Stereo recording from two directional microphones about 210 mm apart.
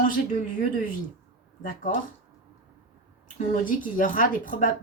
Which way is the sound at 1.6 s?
40° left (ahead or behind).